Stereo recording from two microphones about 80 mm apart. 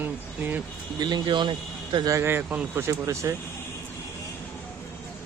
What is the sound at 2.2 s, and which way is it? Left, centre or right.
Speech, right.